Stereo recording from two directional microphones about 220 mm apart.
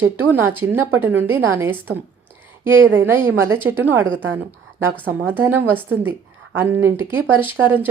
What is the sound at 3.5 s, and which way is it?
Speech, 10° right (ahead or behind).